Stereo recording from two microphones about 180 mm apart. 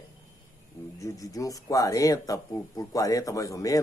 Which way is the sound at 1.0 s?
20° left (ahead or behind).